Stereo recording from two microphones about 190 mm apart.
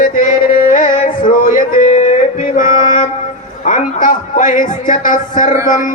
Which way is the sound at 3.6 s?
45° left (ahead or behind).